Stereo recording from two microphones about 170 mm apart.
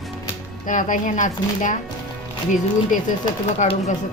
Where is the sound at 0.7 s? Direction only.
50° left (ahead or behind).